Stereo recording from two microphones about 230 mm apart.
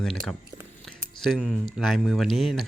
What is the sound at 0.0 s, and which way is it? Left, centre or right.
Speech, centre.